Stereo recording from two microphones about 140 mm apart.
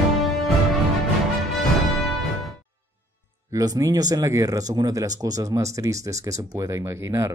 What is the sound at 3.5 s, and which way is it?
Speech, 25° right (ahead or behind).